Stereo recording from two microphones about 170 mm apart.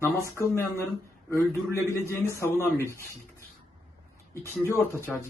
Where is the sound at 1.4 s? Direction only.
15° right (ahead or behind).